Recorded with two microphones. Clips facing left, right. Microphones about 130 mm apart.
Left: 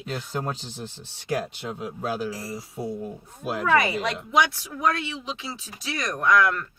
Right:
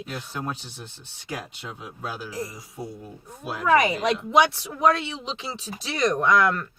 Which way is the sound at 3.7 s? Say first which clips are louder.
Right 3 dB; 15° right (ahead or behind).